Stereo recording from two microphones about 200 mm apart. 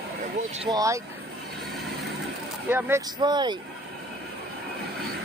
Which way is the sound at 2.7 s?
15° right (ahead or behind).